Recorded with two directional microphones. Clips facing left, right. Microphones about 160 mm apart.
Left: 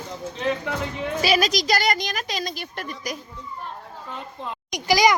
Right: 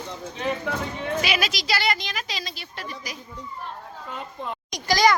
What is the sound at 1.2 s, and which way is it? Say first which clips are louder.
A woman's voice: left 6 dB; 40° left (ahead or behind).